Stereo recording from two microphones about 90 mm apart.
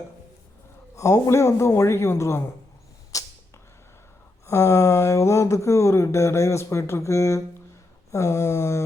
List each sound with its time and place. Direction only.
0.9 s speech: 35° left (ahead or behind)
3.1 s a sound: 40° left (ahead or behind)
4.4 s speech: 35° left (ahead or behind)